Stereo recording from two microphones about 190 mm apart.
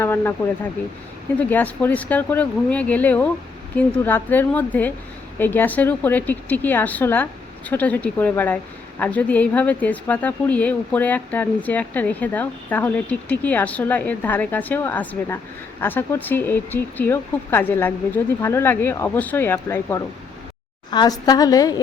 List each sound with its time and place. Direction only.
0.0 s a woman's voice: 10° left (ahead or behind)
1.4 s a woman's voice: 10° left (ahead or behind)